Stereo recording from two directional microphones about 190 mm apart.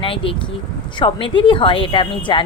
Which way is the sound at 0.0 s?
30° left (ahead or behind).